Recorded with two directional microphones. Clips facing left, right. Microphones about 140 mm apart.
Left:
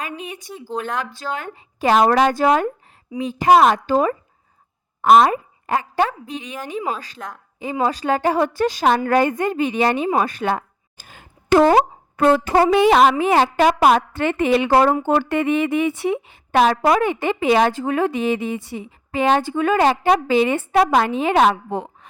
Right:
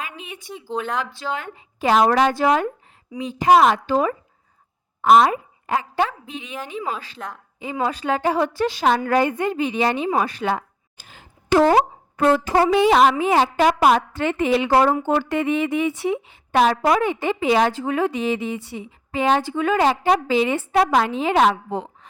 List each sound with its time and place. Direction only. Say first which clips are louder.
0.0 s a woman's voice: left 4 dB; 40° left (ahead or behind)
0.4 s speech: right 2 dB; centre (ahead or behind)
1.3 s a woman's voice: even; 45° left (ahead or behind)
10.2 s a sound: left 2 dB; 50° left (ahead or behind)
11.7 s a woman's voice: left 2 dB; 60° left (ahead or behind)